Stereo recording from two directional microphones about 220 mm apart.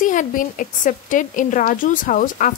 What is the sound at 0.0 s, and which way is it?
A woman's voice, 35° left (ahead or behind).